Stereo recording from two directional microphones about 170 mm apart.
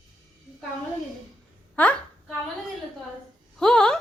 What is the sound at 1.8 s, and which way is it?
Speech, 10° left (ahead or behind).